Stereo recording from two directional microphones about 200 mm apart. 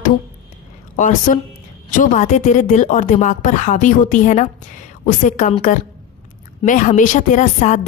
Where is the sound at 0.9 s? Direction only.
40° left (ahead or behind).